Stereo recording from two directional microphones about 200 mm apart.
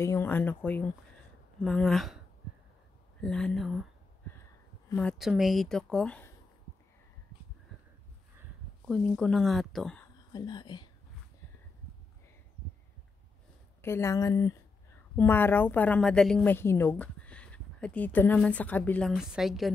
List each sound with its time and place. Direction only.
0.0 s a woman's voice: 10° left (ahead or behind)
3.2 s speech: 5° left (ahead or behind)
4.9 s speech: 5° left (ahead or behind)
8.8 s speech: 5° left (ahead or behind)
10.3 s speech: 20° left (ahead or behind)
13.7 s a woman's voice: 10° left (ahead or behind)